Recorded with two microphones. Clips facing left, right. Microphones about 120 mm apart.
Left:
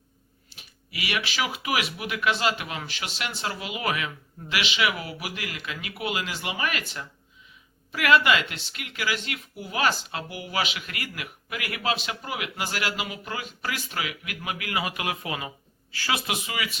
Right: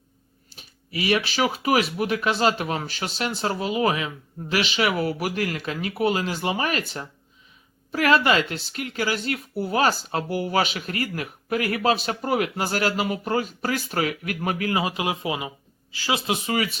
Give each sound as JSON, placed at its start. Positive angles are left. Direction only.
{"t": 0.5, "sound": "speech", "side_deg": -35}
{"t": 7.9, "sound": "speech", "side_deg": -35}